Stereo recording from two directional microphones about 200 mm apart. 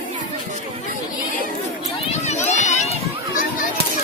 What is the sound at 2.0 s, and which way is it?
Run, 35° left (ahead or behind).